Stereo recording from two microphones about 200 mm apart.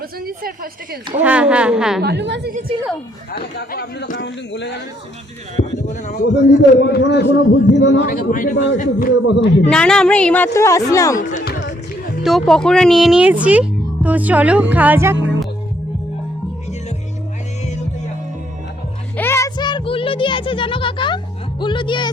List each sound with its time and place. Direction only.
0.3 s a woman's voice: 45° right (ahead or behind)
1.2 s speech: 5° right (ahead or behind)
2.0 s a woman's voice: 55° right (ahead or behind)
3.3 s a man's voice: 55° left (ahead or behind)
5.5 s speech: 35° left (ahead or behind)
6.7 s a man's voice: 55° left (ahead or behind)
8.1 s a man's voice: 45° left (ahead or behind)
9.1 s a man's voice: 60° left (ahead or behind)
9.6 s a woman's voice: 5° left (ahead or behind)
11.2 s speech: 40° left (ahead or behind)
11.4 s music: 55° left (ahead or behind)
12.2 s speech: centre (ahead or behind)
19.1 s music: 10° left (ahead or behind)